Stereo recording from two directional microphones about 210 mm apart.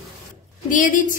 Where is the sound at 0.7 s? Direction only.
40° left (ahead or behind).